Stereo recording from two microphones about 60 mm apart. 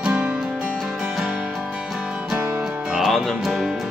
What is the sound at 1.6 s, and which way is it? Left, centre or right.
Music, centre.